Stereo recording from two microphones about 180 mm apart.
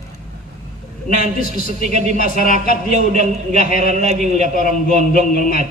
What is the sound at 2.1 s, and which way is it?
A man's voice, 50° left (ahead or behind).